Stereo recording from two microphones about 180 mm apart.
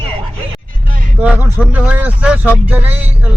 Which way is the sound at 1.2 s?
10° right (ahead or behind).